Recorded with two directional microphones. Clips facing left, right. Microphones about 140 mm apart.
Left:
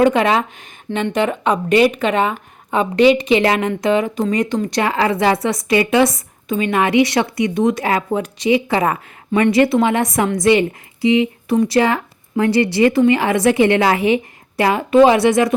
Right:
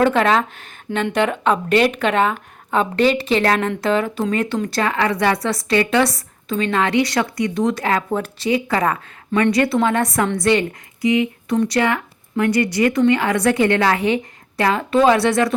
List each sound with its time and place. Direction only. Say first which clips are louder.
0.0 s a woman's voice: left 2 dB; 15° left (ahead or behind)
4.8 s a woman's voice: left 2 dB; 25° left (ahead or behind)